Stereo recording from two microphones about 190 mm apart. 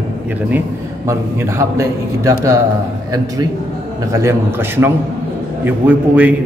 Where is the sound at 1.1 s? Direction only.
15° right (ahead or behind).